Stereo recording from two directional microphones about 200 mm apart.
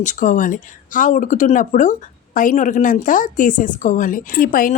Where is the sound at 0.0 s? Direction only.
40° left (ahead or behind).